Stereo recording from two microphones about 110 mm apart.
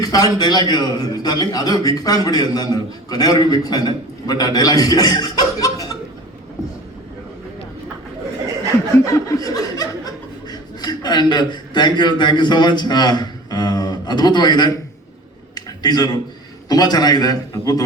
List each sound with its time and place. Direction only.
0.0 s a man's voice: 35° left (ahead or behind)
9.0 s laughter: 30° left (ahead or behind)
10.5 s a man's voice: 40° left (ahead or behind)
15.5 s a sound: 40° left (ahead or behind)
16.6 s a man's voice: 40° left (ahead or behind)